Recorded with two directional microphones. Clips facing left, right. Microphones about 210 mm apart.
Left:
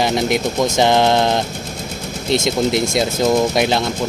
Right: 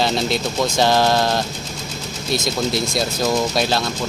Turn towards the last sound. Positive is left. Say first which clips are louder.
# left 4 dB
turn(degrees=20)  # may be behind; listen again after turning